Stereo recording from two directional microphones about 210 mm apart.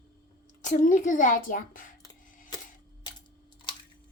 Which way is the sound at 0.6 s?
35° left (ahead or behind).